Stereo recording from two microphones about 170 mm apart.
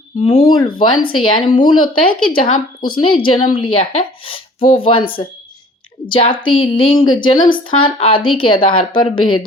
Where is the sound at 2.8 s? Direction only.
30° left (ahead or behind).